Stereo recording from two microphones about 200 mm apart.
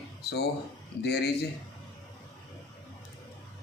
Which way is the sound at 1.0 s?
55° left (ahead or behind).